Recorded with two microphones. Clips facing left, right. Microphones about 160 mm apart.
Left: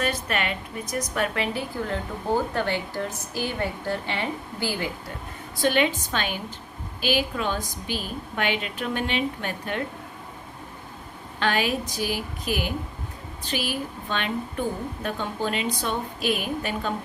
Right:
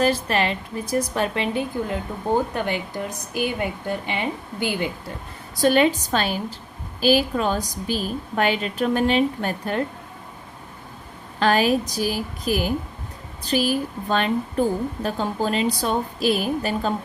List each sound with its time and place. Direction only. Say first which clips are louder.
0.0 s a woman's voice: right 6 dB; 30° right (ahead or behind)
5.5 s a woman's voice: right 5 dB; 40° right (ahead or behind)
11.3 s a woman's voice: right 6 dB; 40° right (ahead or behind)